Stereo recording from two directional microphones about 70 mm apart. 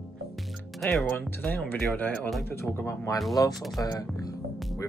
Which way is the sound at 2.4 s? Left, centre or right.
Left.